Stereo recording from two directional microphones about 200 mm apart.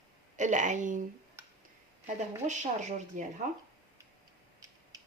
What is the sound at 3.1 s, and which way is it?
Speech, 40° right (ahead or behind).